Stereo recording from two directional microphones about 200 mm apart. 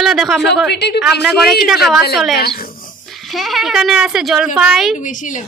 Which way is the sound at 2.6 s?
45° left (ahead or behind).